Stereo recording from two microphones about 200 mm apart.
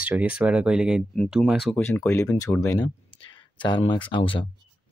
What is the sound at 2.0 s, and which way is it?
Speech, 15° left (ahead or behind).